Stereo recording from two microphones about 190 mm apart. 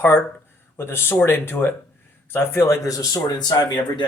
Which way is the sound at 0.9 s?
10° left (ahead or behind).